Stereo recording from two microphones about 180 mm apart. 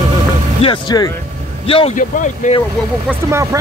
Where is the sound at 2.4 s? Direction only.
45° left (ahead or behind).